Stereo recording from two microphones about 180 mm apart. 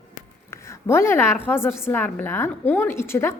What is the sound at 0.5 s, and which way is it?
A woman's voice, 15° left (ahead or behind).